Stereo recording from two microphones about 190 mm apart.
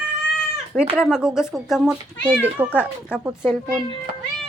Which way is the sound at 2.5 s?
10° right (ahead or behind).